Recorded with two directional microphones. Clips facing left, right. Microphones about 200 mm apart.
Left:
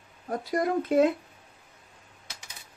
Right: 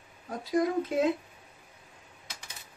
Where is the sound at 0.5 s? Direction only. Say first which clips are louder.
Left 1 dB; 60° left (ahead or behind).